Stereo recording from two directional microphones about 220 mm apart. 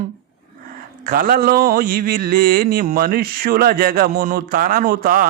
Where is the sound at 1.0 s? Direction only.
40° right (ahead or behind).